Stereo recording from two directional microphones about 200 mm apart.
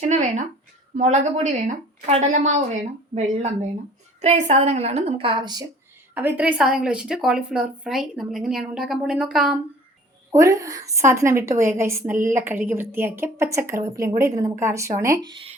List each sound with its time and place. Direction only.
0.0 s a woman's voice: 35° right (ahead or behind)
6.1 s a woman's voice: 10° right (ahead or behind)
10.3 s a woman's voice: 15° right (ahead or behind)